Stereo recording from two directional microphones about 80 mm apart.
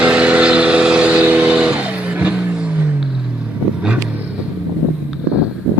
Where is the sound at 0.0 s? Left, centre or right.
Centre.